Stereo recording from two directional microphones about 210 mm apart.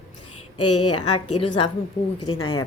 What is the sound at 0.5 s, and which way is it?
Speech, 90° left.